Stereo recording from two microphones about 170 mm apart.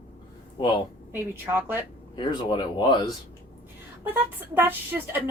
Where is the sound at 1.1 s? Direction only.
10° right (ahead or behind).